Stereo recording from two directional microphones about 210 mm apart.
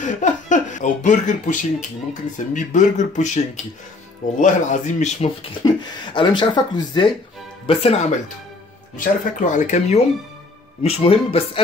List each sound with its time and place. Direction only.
0.0 s speech: 35° left (ahead or behind)
4.4 s speech: 35° left (ahead or behind)